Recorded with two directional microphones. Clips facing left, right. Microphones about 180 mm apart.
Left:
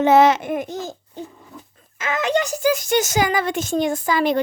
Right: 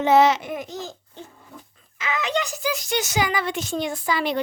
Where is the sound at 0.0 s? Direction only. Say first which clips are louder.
Left 3 dB; 50° left (ahead or behind).